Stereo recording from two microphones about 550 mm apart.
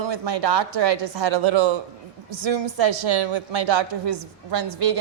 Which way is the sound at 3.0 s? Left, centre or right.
Right.